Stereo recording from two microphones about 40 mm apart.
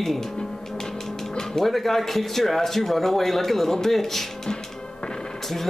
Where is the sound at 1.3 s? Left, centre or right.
Centre.